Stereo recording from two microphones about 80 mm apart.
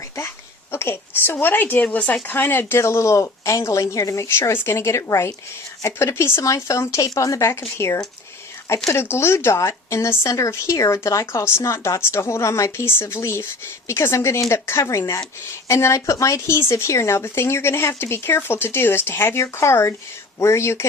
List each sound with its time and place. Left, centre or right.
0.7 s a woman's voice: left